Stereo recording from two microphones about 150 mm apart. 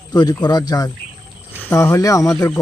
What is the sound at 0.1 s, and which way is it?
A man's voice, 25° left (ahead or behind).